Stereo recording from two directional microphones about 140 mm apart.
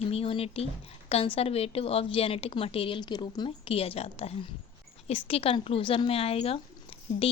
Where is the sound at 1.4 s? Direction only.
45° left (ahead or behind).